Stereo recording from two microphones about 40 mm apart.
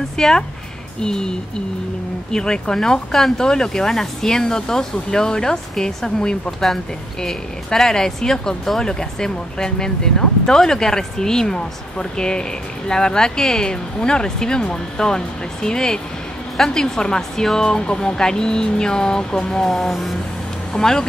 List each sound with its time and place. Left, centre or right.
0.2 s speech: centre
2.3 s speech: centre
7.2 s speech: centre